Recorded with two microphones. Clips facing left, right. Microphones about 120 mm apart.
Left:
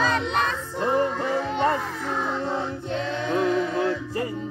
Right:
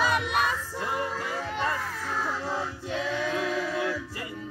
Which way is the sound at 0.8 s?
30° left (ahead or behind).